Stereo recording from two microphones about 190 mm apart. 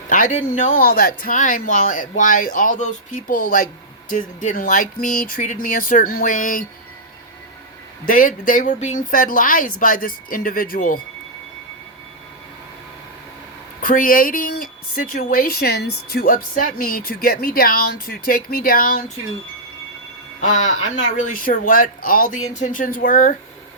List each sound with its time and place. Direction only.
0.1 s speech: 40° left (ahead or behind)
8.0 s speech: 45° left (ahead or behind)
13.8 s speech: 50° left (ahead or behind)
20.4 s speech: 40° left (ahead or behind)